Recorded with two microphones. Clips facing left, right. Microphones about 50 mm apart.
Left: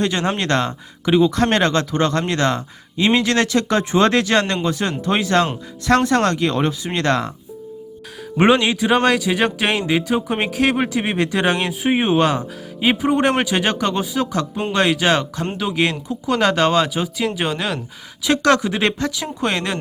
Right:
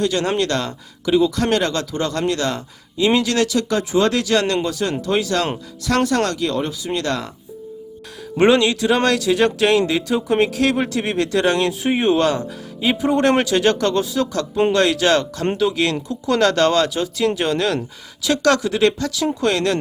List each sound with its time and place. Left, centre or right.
0.0 s speech: left
8.4 s speech: left
18.2 s speech: left